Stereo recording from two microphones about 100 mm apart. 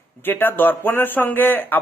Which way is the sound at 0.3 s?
20° left (ahead or behind).